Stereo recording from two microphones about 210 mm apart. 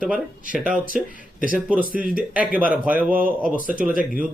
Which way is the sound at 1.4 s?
40° right (ahead or behind).